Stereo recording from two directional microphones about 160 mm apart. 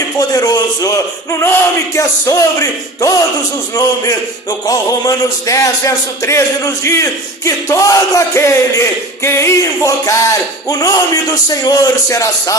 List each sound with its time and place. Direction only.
0.2 s speech: 25° left (ahead or behind)